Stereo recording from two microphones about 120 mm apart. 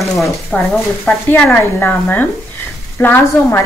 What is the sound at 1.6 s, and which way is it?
A woman's voice, 25° left (ahead or behind).